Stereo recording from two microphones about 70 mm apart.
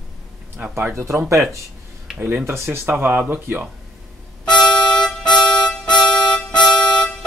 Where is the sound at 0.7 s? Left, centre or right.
Right.